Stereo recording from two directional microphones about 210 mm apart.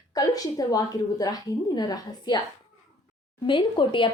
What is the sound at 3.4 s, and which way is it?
Speech, 20° left (ahead or behind).